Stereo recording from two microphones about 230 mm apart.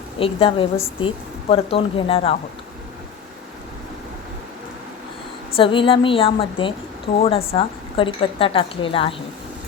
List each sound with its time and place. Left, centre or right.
0.2 s speech: left
5.5 s speech: left